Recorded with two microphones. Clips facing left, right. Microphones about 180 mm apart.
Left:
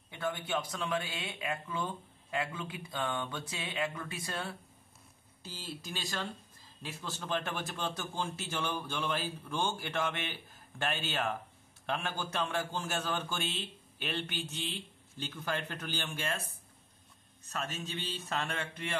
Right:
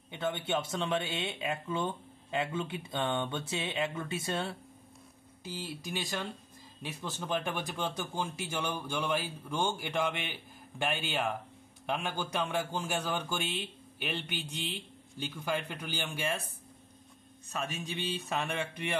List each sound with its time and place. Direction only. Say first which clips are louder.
0.1 s a sound: right 2 dB; 20° right (ahead or behind)
0.5 s speech: right 4 dB; 25° right (ahead or behind)
5.4 s a man's voice: right 4 dB; 15° right (ahead or behind)
17.5 s a man's voice: right 2 dB; 15° right (ahead or behind)